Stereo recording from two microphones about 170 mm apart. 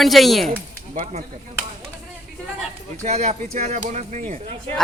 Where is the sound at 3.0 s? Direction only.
45° right (ahead or behind).